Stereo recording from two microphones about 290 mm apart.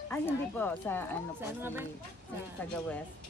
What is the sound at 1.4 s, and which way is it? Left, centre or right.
Speech, centre.